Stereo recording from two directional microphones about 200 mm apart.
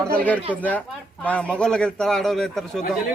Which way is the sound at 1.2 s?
5° left (ahead or behind).